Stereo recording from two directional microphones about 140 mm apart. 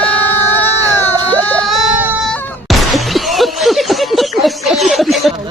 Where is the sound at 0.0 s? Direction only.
15° left (ahead or behind).